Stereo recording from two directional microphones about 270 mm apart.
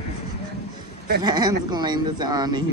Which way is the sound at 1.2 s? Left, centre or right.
Centre.